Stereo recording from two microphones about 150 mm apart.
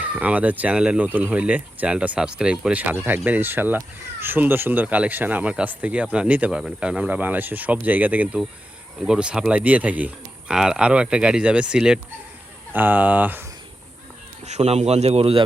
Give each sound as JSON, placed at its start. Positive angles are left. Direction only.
{"t": 0.0, "sound": "speech", "side_deg": -10}
{"t": 14.4, "sound": "a man's voice", "side_deg": -50}